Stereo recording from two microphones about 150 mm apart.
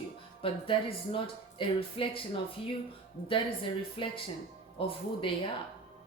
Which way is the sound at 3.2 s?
35° left (ahead or behind).